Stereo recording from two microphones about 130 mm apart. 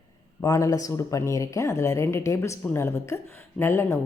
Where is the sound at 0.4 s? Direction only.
25° left (ahead or behind).